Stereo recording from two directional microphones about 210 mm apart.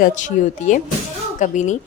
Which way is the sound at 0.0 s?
35° left (ahead or behind).